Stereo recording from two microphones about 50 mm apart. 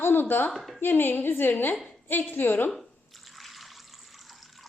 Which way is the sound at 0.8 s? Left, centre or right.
Left.